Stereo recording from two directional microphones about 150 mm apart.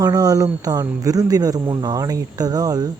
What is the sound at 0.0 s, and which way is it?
Speech, 25° right (ahead or behind).